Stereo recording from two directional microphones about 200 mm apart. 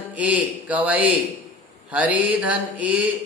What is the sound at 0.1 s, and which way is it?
Mantra, 5° right (ahead or behind).